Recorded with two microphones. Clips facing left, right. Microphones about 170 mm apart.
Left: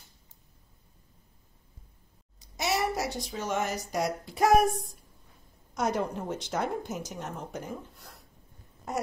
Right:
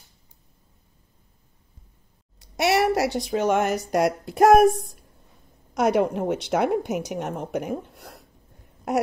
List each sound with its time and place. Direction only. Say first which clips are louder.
2.3 s speech: right 9 dB; 65° right (ahead or behind)
5.8 s a woman's voice: right 9 dB; 70° right (ahead or behind)